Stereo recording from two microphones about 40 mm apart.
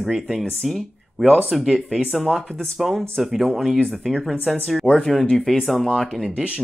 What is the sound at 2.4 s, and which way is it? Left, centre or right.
Speech, centre.